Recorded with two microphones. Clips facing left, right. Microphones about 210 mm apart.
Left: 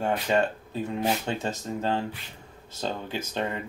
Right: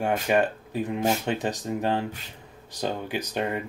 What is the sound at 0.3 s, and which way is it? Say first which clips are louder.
Speech: right 2 dB; 15° right (ahead or behind).